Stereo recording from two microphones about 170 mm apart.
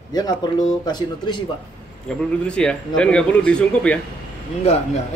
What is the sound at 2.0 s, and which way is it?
A man's voice, 5° left (ahead or behind).